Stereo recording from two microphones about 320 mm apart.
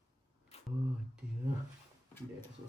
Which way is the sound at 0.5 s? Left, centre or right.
Centre.